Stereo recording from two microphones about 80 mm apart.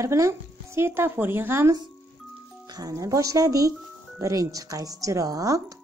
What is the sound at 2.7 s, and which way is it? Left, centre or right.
Speech, right.